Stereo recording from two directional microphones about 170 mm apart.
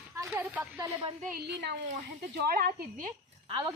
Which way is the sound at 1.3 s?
75° right (ahead or behind).